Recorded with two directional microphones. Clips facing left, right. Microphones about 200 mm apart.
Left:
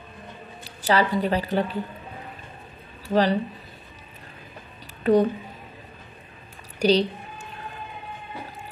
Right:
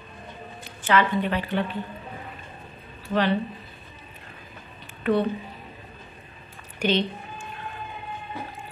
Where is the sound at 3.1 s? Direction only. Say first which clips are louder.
Left 2 dB; 40° left (ahead or behind).